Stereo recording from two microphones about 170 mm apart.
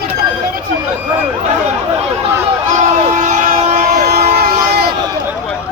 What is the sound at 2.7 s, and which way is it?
Vehicle, 45° right (ahead or behind).